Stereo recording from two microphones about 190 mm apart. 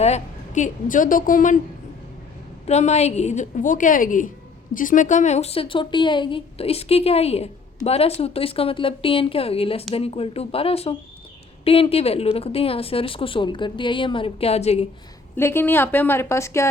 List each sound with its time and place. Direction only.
0.0 s a woman's voice: 35° left (ahead or behind)
2.6 s a woman's voice: 35° left (ahead or behind)
15.4 s a woman's voice: 10° left (ahead or behind)